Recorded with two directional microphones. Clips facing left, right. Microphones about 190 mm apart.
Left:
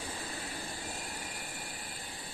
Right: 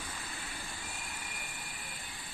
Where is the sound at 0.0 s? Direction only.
35° left (ahead or behind).